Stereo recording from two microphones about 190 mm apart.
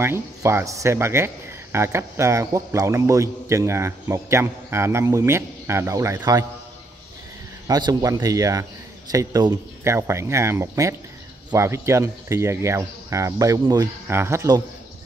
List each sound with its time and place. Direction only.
0.0 s speech: 15° right (ahead or behind)
7.6 s speech: 20° right (ahead or behind)